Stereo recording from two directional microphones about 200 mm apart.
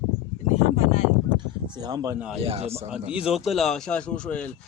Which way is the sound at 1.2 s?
20° right (ahead or behind).